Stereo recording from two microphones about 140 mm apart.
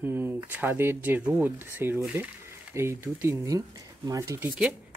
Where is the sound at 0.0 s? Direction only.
15° right (ahead or behind).